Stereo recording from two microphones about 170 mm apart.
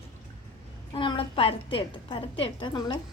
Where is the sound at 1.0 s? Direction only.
30° left (ahead or behind).